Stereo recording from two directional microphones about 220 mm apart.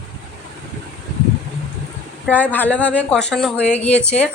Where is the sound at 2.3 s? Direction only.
10° left (ahead or behind).